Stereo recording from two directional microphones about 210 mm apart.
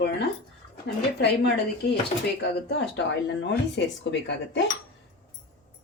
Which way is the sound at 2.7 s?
55° left (ahead or behind).